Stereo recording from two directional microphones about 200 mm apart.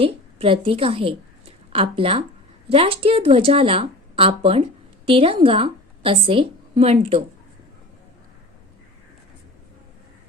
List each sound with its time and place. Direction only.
0.0 s a woman's voice: 25° right (ahead or behind)